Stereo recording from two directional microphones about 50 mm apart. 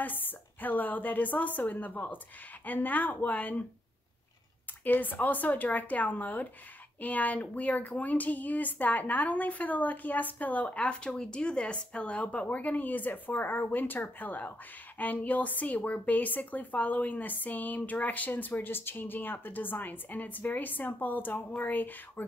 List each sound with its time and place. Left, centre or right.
0.0 s a woman's voice: left
4.8 s a woman's voice: left
18.5 s a woman's voice: left